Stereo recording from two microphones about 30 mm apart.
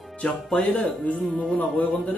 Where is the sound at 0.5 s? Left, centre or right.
Left.